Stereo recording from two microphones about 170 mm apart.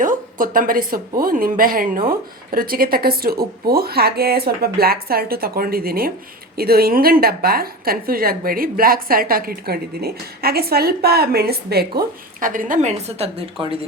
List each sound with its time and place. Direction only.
0.0 s a woman's voice: 50° right (ahead or behind); by 13.7 s 35° right (ahead or behind)